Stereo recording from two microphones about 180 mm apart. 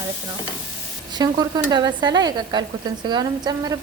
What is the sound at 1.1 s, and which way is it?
A woman's voice, 20° right (ahead or behind).